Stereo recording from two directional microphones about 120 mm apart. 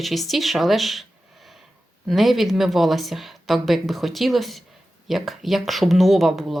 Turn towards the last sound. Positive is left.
turn(degrees=0)  # may be behind; listen again after turning